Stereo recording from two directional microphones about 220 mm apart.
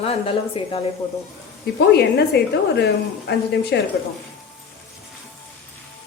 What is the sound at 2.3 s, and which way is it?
Speech, 50° left (ahead or behind).